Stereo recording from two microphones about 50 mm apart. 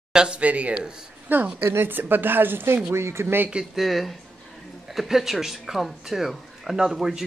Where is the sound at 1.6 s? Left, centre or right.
Right.